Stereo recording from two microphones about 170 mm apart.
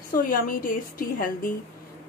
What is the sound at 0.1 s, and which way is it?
A woman's voice, 55° left (ahead or behind).